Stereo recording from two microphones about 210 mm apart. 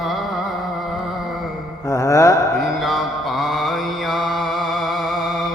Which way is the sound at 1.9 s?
15° left (ahead or behind).